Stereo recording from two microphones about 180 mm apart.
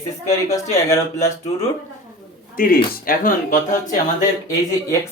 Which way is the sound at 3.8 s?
20° left (ahead or behind).